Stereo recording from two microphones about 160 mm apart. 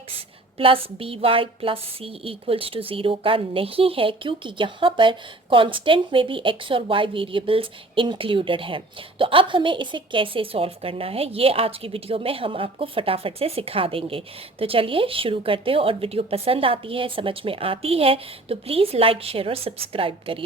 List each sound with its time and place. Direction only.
0.5 s a woman's voice: 35° right (ahead or behind)